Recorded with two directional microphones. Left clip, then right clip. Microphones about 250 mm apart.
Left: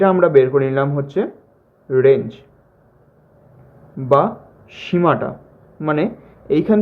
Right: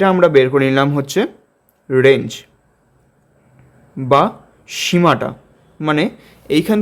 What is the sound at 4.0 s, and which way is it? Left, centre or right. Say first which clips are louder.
Speech: right 2 dB; right.